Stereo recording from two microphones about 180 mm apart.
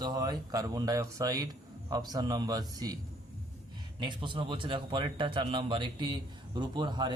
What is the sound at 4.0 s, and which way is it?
Speech, 25° right (ahead or behind).